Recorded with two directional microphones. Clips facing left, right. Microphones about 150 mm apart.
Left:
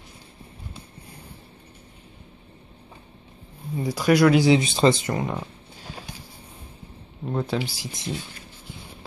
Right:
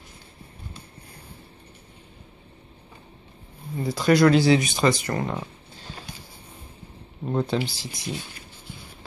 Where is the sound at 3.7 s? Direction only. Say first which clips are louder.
Even; 10° left (ahead or behind).